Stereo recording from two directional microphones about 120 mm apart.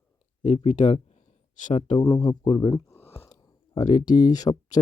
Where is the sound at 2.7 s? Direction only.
20° left (ahead or behind).